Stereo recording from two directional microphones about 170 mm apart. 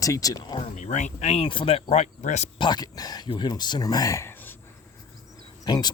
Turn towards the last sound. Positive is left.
turn(degrees=25)  # may be behind; listen again after turning